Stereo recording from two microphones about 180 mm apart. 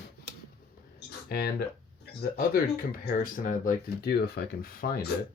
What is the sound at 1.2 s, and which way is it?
Speech, 60° left (ahead or behind).